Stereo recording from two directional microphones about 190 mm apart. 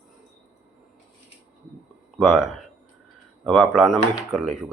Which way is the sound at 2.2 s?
5° right (ahead or behind).